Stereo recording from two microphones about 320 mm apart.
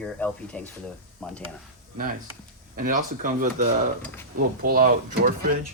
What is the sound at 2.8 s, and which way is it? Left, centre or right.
Speech, right.